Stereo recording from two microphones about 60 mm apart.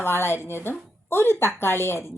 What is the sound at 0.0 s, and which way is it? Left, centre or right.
Speech, left.